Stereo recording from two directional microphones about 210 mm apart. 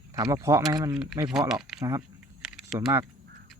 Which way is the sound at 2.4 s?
5° right (ahead or behind).